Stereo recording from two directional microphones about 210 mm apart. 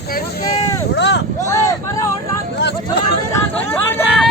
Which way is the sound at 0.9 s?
55° left (ahead or behind).